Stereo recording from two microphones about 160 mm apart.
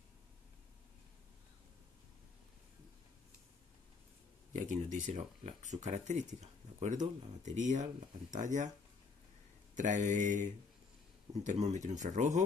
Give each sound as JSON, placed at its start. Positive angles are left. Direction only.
{"t": 4.5, "sound": "speech", "side_deg": -50}
{"t": 9.8, "sound": "speech", "side_deg": -50}